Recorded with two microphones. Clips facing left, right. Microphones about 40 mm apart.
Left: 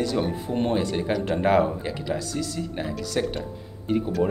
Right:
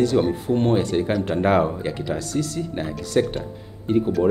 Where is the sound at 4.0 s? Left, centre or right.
Centre.